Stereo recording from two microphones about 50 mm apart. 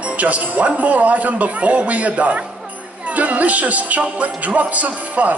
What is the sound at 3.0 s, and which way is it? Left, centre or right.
Music, right.